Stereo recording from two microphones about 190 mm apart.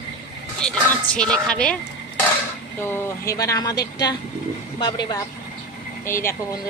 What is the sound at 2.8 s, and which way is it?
A woman's voice, 15° left (ahead or behind).